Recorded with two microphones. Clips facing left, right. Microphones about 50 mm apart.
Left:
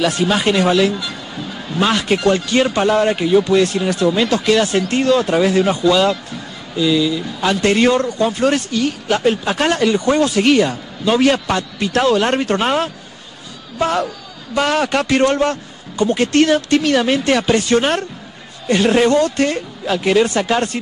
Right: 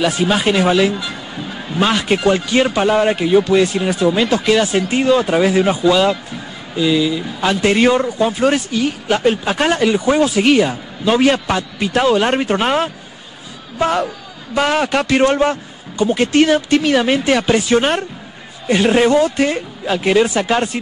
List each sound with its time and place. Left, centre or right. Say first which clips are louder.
0.0 s speech: even; centre
1.8 s a man's voice: even; centre